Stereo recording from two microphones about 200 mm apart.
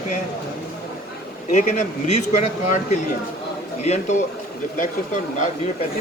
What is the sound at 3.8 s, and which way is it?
Speech, 35° left (ahead or behind).